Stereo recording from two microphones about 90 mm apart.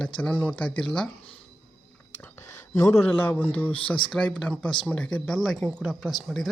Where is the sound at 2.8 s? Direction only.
30° left (ahead or behind).